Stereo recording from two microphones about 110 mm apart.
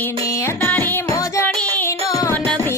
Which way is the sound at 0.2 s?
30° left (ahead or behind).